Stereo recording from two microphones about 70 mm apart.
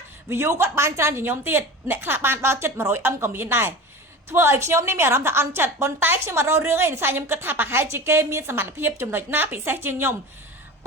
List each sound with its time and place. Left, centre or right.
0.3 s a woman's voice: right